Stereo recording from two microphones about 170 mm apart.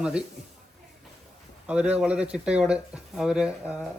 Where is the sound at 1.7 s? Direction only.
5° right (ahead or behind).